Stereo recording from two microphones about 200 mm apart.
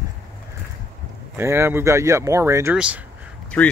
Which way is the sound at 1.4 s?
15° right (ahead or behind).